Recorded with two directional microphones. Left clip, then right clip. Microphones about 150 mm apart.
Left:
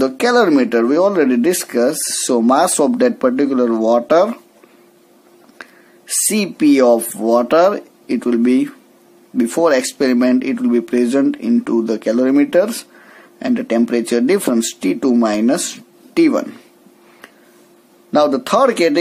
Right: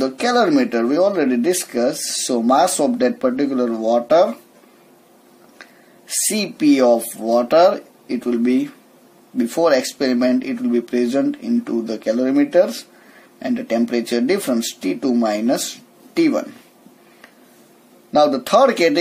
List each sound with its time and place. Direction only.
0.0 s speech: 35° left (ahead or behind)
5.6 s speech: 35° left (ahead or behind)
18.1 s speech: 35° left (ahead or behind)